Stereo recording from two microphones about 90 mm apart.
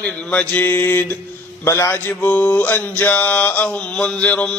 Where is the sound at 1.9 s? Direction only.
20° left (ahead or behind).